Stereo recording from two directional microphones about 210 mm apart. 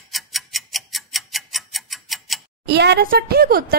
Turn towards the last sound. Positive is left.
turn(degrees=-45)  # may be behind; listen again after turning